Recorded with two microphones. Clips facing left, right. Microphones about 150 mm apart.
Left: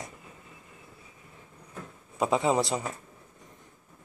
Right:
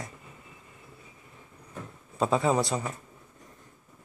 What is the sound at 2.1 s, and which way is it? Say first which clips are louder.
Speech: even; 15° left (ahead or behind).